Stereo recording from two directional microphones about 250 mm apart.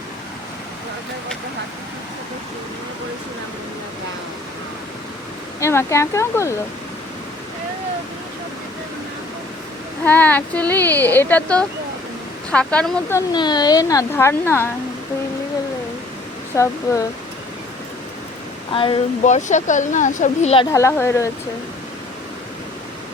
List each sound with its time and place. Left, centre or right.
5.5 s speech: centre
10.1 s speech: centre
16.5 s speech: centre
18.7 s speech: centre
20.7 s speech: centre